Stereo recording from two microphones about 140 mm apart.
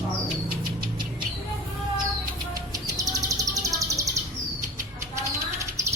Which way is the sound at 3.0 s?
25° right (ahead or behind).